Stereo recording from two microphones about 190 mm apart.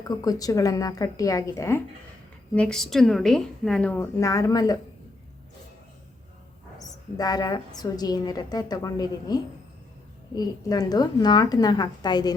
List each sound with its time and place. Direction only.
0.0 s speech: 20° left (ahead or behind)
2.6 s a woman's voice: 5° left (ahead or behind); by 4.8 s 20° left (ahead or behind)
7.2 s a woman's voice: 20° left (ahead or behind)